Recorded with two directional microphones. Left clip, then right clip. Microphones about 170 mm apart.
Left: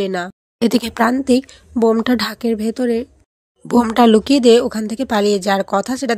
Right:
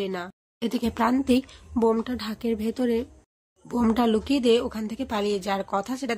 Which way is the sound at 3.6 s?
45° left (ahead or behind).